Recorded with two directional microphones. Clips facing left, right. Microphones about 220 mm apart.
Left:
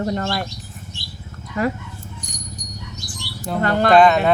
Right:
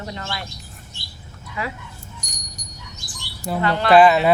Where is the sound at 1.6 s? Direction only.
45° left (ahead or behind).